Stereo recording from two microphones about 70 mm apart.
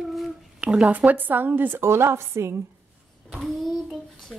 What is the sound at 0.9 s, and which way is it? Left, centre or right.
A woman's voice, right.